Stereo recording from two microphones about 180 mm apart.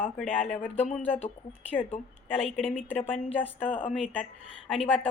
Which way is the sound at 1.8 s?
30° left (ahead or behind).